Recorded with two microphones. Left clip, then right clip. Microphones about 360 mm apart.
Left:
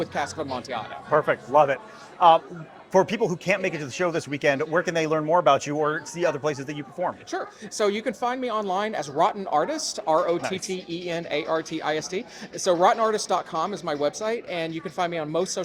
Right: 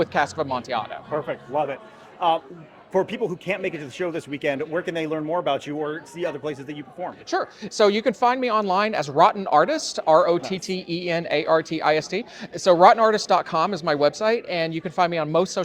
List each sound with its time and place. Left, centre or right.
0.0 s speech: right
1.1 s a man's voice: left
2.9 s speech: left
7.3 s speech: right